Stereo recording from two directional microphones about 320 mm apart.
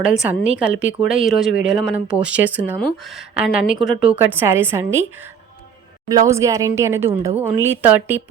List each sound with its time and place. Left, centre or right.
0.0 s speech: centre